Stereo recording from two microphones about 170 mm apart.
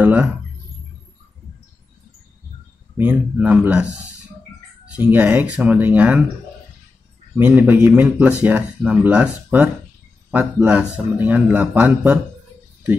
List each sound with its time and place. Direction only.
0.0 s speech: 10° right (ahead or behind)
3.0 s speech: 10° right (ahead or behind)
4.9 s speech: 10° right (ahead or behind)
7.3 s speech: 10° right (ahead or behind)